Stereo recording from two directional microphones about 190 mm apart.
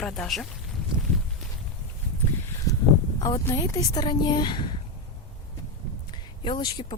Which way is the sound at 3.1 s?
25° left (ahead or behind).